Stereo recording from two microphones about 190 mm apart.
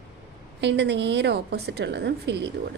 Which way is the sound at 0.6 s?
65° right (ahead or behind).